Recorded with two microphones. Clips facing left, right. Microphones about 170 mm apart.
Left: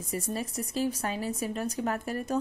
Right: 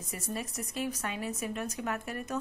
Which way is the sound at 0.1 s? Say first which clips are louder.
Left 5 dB; 30° left (ahead or behind).